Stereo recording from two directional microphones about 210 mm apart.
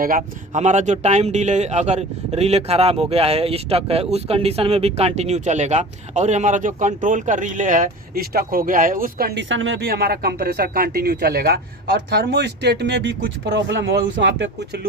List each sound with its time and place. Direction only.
0.0 s a man's voice: 40° right (ahead or behind); by 9.7 s 65° right (ahead or behind)
9.8 s speech: 45° right (ahead or behind)